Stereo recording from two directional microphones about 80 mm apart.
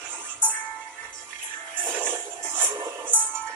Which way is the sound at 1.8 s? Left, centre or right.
Right.